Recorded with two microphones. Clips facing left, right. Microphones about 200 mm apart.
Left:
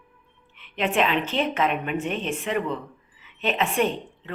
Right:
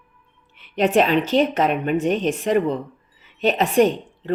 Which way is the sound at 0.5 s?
40° right (ahead or behind).